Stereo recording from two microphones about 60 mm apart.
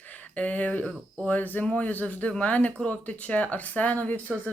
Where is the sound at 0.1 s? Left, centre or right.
Left.